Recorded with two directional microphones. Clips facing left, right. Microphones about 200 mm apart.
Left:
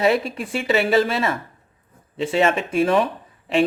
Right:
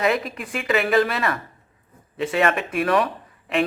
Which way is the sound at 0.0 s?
30° left (ahead or behind).